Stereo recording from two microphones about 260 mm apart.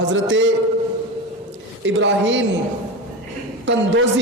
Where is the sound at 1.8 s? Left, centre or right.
Right.